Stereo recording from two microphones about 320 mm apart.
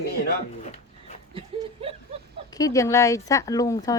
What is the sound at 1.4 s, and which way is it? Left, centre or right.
Snicker, centre.